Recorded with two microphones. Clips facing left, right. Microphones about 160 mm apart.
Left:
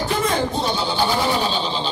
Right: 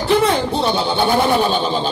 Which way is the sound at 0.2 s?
65° right (ahead or behind).